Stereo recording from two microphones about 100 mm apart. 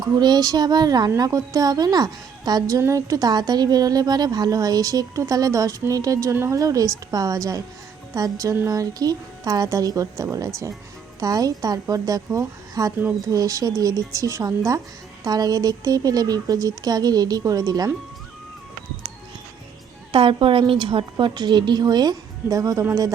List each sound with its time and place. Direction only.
0.0 s a woman's voice: 40° right (ahead or behind)
20.1 s a woman's voice: 60° right (ahead or behind); by 22.9 s 35° right (ahead or behind)